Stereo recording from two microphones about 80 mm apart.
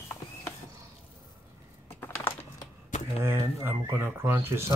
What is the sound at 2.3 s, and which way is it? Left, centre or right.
Typing, left.